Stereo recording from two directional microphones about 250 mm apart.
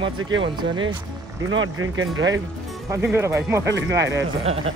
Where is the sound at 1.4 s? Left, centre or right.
Right.